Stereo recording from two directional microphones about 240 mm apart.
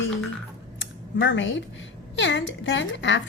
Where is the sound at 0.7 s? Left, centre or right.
Left.